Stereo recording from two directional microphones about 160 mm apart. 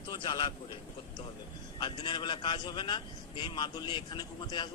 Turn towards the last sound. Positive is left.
turn(degrees=30)  # may be behind; listen again after turning